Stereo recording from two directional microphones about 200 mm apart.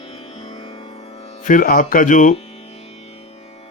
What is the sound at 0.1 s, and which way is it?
Music, 25° left (ahead or behind).